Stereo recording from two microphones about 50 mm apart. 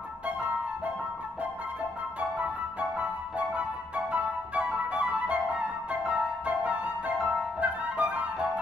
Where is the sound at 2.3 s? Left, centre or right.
Right.